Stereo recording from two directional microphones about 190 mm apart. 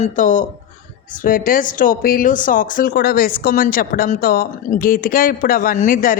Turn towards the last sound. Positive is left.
turn(degrees=45)  # may be behind; listen again after turning